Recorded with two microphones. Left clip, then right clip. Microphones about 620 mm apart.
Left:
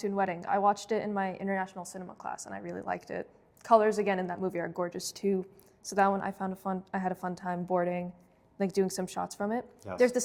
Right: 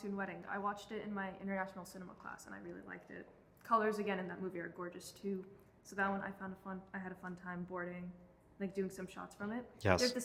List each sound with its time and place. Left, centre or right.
0.0 s a woman's voice: left
9.8 s speech: right